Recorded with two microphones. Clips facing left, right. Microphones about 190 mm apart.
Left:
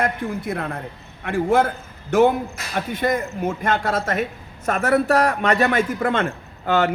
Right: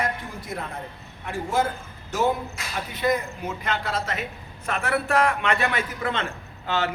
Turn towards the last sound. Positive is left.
turn(degrees=50)  # may be behind; listen again after turning